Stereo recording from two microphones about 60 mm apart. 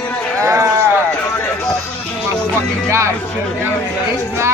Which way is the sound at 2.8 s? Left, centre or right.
Right.